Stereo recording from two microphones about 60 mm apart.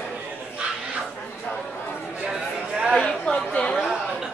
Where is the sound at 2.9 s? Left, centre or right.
Centre.